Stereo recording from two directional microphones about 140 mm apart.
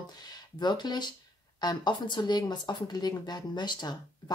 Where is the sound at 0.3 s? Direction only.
30° left (ahead or behind).